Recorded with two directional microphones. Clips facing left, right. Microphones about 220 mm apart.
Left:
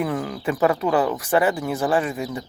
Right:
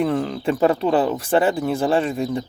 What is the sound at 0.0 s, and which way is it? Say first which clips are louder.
Speech: right 4 dB; 25° right (ahead or behind).